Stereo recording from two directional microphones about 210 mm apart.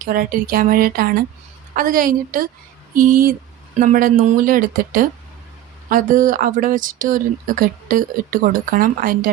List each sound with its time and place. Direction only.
0.0 s speech: 45° right (ahead or behind)